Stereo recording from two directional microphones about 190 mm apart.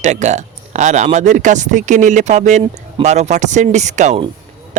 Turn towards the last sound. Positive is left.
turn(degrees=-40)  # may be behind; listen again after turning